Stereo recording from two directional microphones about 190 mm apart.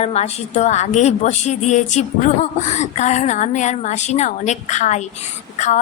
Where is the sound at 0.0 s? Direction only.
35° left (ahead or behind).